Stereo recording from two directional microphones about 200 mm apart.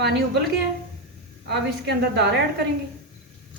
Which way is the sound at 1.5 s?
55° right (ahead or behind).